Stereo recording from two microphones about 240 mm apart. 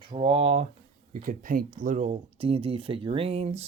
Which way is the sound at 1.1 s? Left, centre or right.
Right.